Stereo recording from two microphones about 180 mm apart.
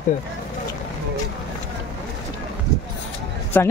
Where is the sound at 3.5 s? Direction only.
10° left (ahead or behind).